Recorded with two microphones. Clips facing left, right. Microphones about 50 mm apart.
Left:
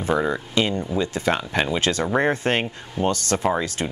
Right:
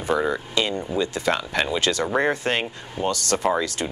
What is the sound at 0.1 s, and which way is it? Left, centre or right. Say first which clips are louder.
Speech: left 1 dB; left.